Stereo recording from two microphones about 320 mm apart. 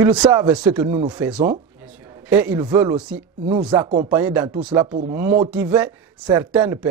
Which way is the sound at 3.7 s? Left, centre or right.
Centre.